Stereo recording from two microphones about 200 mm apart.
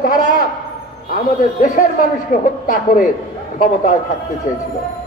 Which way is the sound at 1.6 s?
40° left (ahead or behind).